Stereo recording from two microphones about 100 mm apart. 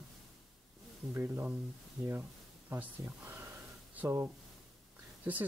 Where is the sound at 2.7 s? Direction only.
20° right (ahead or behind).